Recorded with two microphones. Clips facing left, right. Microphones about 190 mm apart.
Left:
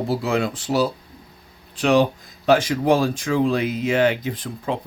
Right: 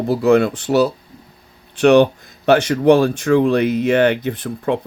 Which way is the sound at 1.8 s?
70° right (ahead or behind).